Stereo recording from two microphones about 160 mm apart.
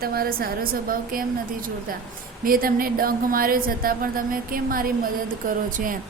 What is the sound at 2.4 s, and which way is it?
A woman's voice, 65° right (ahead or behind).